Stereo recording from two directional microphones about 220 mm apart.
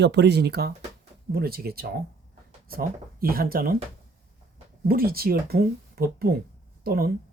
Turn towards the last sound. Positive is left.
turn(degrees=-45)  # may be behind; listen again after turning